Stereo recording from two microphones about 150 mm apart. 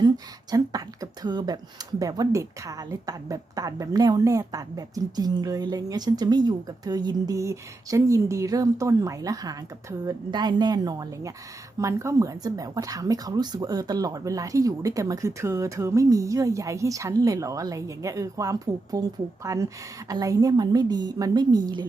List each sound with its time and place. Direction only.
0.5 s a woman's voice: 25° right (ahead or behind)